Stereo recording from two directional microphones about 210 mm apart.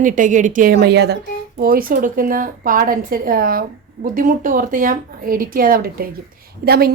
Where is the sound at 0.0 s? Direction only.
35° right (ahead or behind).